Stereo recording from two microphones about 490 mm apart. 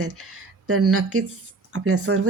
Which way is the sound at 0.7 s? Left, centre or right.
Right.